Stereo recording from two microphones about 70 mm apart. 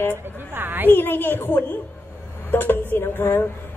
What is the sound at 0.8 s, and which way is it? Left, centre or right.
A woman's voice, left.